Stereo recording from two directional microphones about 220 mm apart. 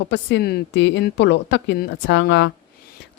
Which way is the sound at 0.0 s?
55° left (ahead or behind).